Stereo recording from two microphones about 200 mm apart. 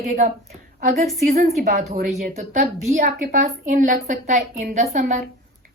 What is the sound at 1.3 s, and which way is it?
A woman's voice, 40° right (ahead or behind).